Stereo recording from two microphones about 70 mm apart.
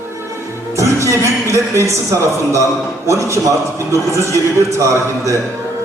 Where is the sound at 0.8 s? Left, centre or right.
Right.